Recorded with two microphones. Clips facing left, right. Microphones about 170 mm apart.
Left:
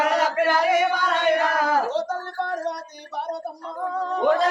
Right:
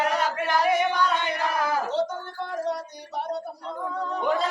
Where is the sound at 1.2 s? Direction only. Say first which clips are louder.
Left 8 dB; 65° left (ahead or behind).